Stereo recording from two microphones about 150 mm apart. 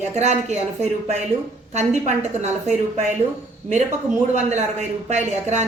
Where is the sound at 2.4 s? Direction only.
50° right (ahead or behind).